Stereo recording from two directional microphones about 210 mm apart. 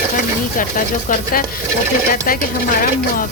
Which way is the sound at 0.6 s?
40° left (ahead or behind).